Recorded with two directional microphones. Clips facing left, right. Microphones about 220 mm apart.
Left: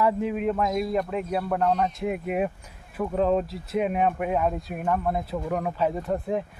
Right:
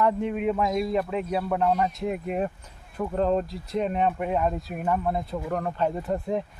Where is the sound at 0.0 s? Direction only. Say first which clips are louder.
Even; 5° left (ahead or behind).